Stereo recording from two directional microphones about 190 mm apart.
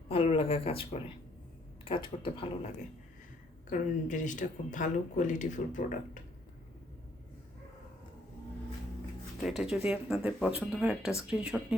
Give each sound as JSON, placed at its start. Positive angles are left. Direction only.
{"t": 0.1, "sound": "speech", "side_deg": 30}
{"t": 3.7, "sound": "speech", "side_deg": 40}
{"t": 9.4, "sound": "speech", "side_deg": 0}